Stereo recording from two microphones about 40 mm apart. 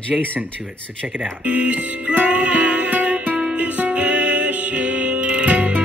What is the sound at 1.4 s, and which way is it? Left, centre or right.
Music, right.